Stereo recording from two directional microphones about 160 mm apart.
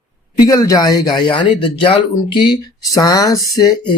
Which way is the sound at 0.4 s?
20° left (ahead or behind).